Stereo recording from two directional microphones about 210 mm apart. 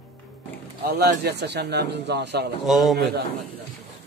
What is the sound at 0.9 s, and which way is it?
Speech, 50° right (ahead or behind).